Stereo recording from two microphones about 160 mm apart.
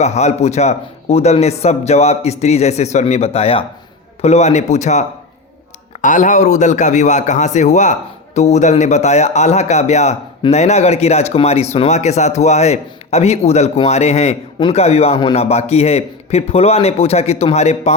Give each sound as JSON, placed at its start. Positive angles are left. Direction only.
{"t": 0.0, "sound": "a man's voice", "side_deg": 45}